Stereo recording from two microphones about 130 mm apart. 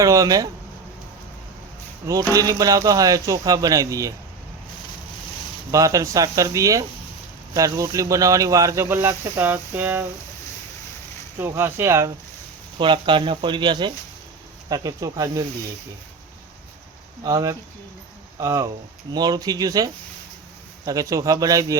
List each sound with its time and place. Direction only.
0.0 s speech: 25° right (ahead or behind)
2.3 s speech: 25° right (ahead or behind)
5.7 s speech: 25° right (ahead or behind)
11.3 s speech: 20° right (ahead or behind)
12.8 s speech: 40° right (ahead or behind)
17.2 s speech: 25° right (ahead or behind)